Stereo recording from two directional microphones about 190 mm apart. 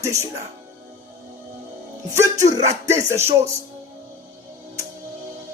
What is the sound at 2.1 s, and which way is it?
Music, 15° right (ahead or behind).